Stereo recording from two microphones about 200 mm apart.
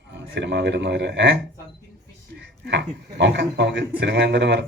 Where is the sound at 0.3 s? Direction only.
60° right (ahead or behind).